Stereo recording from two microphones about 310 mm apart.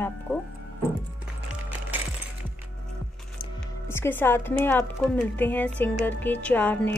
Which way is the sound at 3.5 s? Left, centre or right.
Centre.